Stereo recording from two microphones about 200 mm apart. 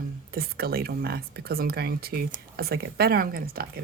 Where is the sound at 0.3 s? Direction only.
50° right (ahead or behind).